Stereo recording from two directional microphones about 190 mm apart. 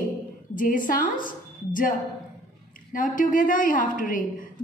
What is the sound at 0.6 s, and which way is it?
A woman's voice, 45° left (ahead or behind).